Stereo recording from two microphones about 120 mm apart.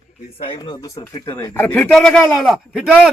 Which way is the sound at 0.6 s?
35° left (ahead or behind).